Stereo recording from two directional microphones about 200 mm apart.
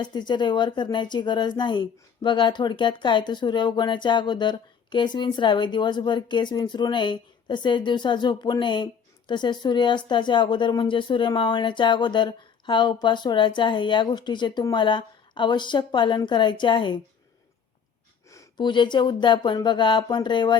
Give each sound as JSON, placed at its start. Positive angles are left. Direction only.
{"t": 0.0, "sound": "speech", "side_deg": 20}
{"t": 18.3, "sound": "speech", "side_deg": 20}